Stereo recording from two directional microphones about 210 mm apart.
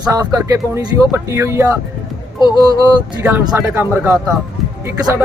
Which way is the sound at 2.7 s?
20° right (ahead or behind).